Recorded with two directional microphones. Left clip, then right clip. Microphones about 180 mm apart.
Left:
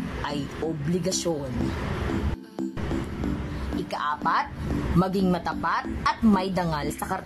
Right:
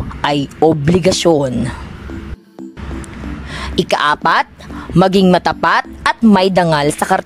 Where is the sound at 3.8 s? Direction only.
50° right (ahead or behind).